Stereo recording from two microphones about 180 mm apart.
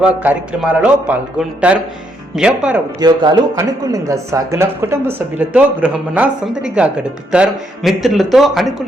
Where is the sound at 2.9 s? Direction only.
20° right (ahead or behind).